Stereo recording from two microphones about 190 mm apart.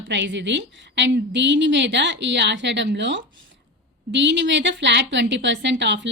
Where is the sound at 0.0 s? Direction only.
70° right (ahead or behind).